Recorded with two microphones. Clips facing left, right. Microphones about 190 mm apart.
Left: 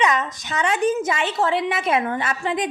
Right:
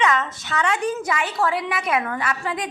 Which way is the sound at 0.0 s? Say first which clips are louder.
Even; 20° left (ahead or behind).